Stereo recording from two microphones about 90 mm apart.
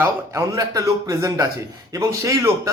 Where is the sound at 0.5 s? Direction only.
40° right (ahead or behind).